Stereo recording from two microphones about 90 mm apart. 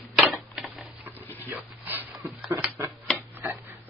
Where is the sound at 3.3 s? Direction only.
25° right (ahead or behind).